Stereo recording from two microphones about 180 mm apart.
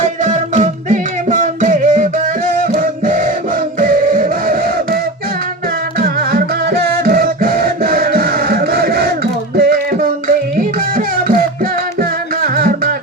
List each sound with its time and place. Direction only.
0.0 s music: 40° right (ahead or behind)
6.0 s music: 55° right (ahead or behind)